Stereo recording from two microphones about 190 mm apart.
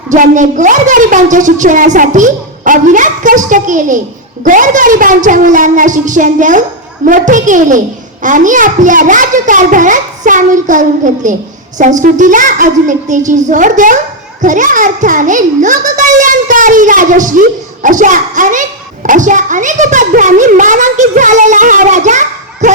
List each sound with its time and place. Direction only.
0.1 s a woman's voice: 40° right (ahead or behind)